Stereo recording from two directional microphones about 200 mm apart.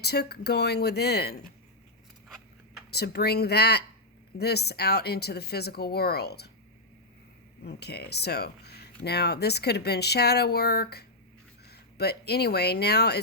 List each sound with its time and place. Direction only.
0.0 s speech: 55° left (ahead or behind)
2.9 s speech: 55° left (ahead or behind)
7.6 s speech: 55° left (ahead or behind)